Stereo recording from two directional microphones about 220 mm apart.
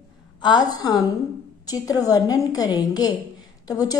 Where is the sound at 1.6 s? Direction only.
15° left (ahead or behind).